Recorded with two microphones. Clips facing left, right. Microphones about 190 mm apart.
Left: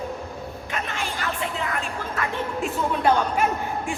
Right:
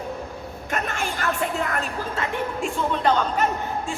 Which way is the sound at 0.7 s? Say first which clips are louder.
Right 4 dB; 45° right (ahead or behind).